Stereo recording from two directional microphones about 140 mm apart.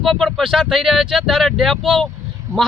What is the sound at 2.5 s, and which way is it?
Speech, 20° right (ahead or behind).